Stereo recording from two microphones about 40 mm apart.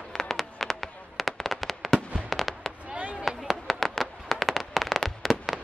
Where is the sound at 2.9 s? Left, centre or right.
Right.